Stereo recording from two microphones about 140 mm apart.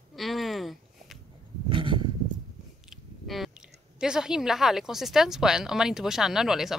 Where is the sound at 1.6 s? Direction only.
35° right (ahead or behind).